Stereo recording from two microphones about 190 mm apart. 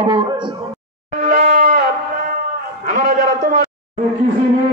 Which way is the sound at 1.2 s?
45° right (ahead or behind).